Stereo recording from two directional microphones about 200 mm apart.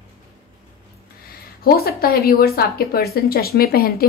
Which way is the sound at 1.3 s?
50° left (ahead or behind).